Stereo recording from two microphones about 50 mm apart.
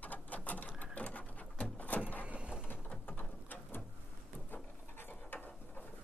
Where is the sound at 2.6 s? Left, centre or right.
Left.